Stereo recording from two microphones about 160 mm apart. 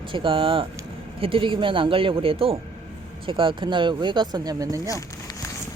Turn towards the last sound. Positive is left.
turn(degrees=-20)  # may be behind; listen again after turning